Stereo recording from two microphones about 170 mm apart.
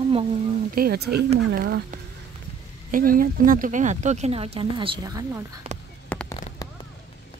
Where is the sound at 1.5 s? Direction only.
60° right (ahead or behind); by 4.9 s 35° right (ahead or behind).